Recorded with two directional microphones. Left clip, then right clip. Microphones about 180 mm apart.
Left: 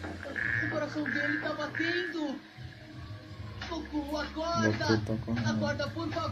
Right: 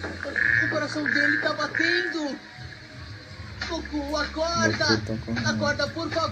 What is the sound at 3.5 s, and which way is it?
Speech, 45° right (ahead or behind).